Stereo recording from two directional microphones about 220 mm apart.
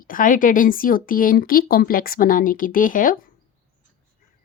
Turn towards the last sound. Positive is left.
turn(degrees=40)  # may be behind; listen again after turning